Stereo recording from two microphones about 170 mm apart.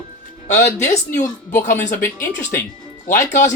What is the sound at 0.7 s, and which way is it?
Speech, 40° left (ahead or behind).